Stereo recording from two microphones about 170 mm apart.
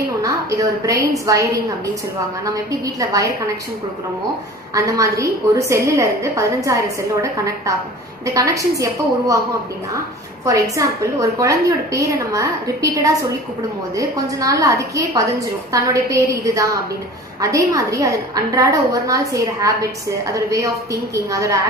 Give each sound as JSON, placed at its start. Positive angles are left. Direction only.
{"t": 0.2, "sound": "a woman's voice", "side_deg": -20}
{"t": 4.7, "sound": "a woman's voice", "side_deg": -20}